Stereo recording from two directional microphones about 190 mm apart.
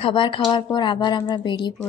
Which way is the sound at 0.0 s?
30° left (ahead or behind).